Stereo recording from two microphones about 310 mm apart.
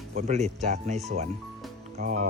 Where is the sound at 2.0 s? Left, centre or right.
Right.